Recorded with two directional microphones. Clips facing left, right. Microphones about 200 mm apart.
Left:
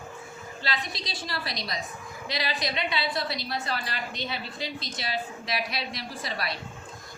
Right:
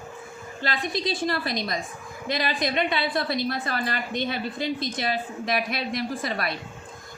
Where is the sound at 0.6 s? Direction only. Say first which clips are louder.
Right 7 dB; 50° right (ahead or behind).